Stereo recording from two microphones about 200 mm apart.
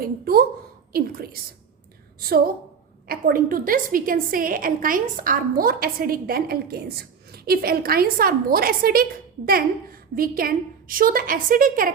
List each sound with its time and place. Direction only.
0.0 s a woman's voice: 50° right (ahead or behind)
3.1 s a woman's voice: 45° right (ahead or behind)